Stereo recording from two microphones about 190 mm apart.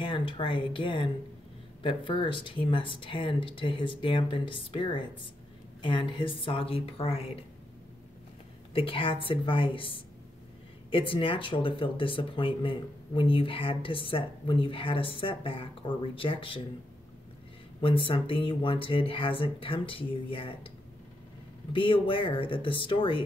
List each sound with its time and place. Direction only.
0.0 s speech: 25° left (ahead or behind)
8.7 s speech: 30° left (ahead or behind)
17.7 s speech: 25° left (ahead or behind)
21.7 s speech: 25° left (ahead or behind)